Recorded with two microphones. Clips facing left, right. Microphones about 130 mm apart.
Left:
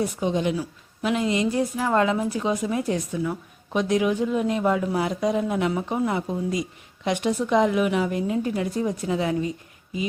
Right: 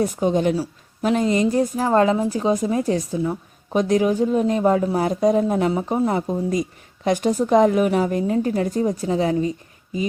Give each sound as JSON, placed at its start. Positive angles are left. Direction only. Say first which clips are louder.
{"t": 0.0, "sound": "a woman's voice", "louder": "right 5 dB", "side_deg": -45}